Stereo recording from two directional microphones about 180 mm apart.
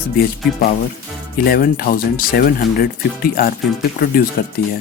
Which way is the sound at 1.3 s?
55° left (ahead or behind).